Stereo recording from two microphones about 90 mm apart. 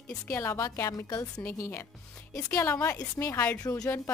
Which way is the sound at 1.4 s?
25° left (ahead or behind).